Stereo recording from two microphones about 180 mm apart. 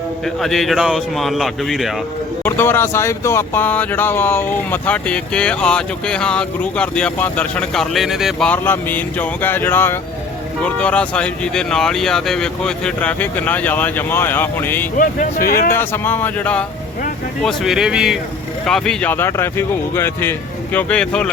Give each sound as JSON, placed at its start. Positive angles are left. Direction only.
{"t": 0.4, "sound": "speech", "side_deg": 0}
{"t": 2.4, "sound": "speech", "side_deg": 10}
{"t": 14.9, "sound": "speech", "side_deg": 50}
{"t": 15.7, "sound": "speech", "side_deg": 10}